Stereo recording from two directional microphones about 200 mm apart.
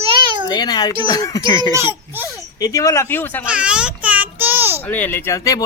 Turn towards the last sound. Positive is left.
turn(degrees=15)  # may be behind; listen again after turning